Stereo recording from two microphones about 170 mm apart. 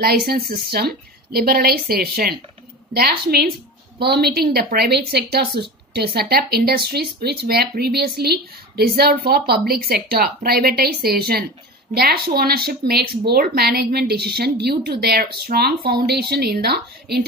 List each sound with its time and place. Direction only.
0.0 s a woman's voice: 65° right (ahead or behind)